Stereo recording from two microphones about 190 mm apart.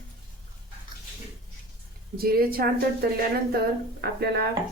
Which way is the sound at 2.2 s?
50° right (ahead or behind).